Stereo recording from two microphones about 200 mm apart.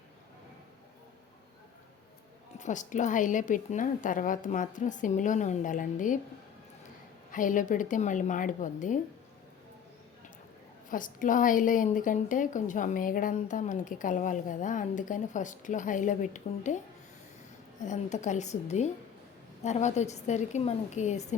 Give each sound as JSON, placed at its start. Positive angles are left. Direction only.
{"t": 2.6, "sound": "a woman's voice", "side_deg": 40}
{"t": 7.3, "sound": "a woman's voice", "side_deg": 40}
{"t": 10.8, "sound": "a woman's voice", "side_deg": 40}
{"t": 17.7, "sound": "a woman's voice", "side_deg": 35}